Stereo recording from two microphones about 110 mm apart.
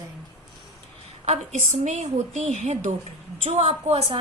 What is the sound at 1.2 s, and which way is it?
A woman's voice, 85° right.